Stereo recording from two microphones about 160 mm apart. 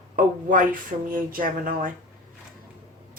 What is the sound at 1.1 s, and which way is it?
Speech, 60° right (ahead or behind).